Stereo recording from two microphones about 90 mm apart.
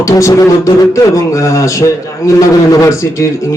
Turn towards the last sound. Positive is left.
turn(degrees=35)  # may be behind; listen again after turning